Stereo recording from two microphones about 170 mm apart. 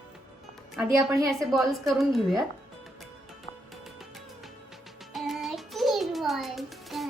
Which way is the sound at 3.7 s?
Centre (ahead or behind).